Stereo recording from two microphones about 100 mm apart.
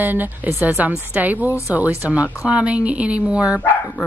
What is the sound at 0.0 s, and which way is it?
Speech, 20° right (ahead or behind).